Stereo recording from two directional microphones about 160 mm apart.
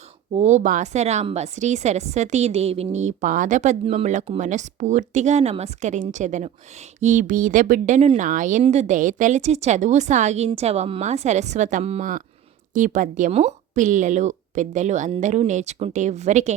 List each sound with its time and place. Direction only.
0.3 s a woman's voice: 45° right (ahead or behind)
12.7 s a woman's voice: 55° right (ahead or behind)